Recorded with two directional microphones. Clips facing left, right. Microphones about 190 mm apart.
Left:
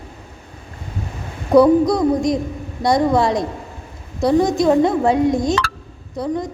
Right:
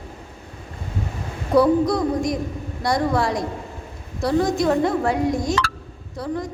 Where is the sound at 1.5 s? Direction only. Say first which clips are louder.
Left 5 dB; 20° left (ahead or behind).